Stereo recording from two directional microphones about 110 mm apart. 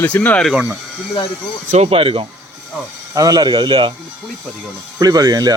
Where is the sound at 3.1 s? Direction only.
30° right (ahead or behind).